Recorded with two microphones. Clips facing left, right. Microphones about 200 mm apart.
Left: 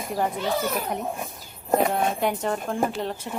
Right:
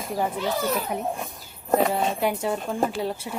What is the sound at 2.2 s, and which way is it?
Speech, 10° right (ahead or behind).